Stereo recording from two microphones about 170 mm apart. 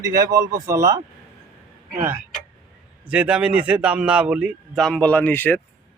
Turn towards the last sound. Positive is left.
turn(degrees=10)  # may be behind; listen again after turning